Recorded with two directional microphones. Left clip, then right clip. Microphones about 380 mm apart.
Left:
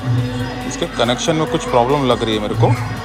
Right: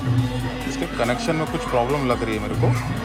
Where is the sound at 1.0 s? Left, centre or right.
Centre.